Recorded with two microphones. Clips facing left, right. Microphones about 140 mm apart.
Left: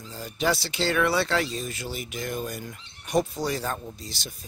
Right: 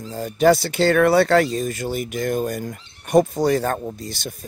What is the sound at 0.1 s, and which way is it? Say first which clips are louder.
Speech: right 10 dB; 50° right (ahead or behind).